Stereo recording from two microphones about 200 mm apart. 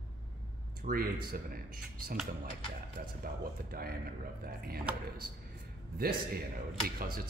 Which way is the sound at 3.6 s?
50° right (ahead or behind).